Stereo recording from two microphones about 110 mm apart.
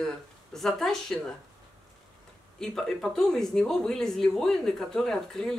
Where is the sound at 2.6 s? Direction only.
5° left (ahead or behind).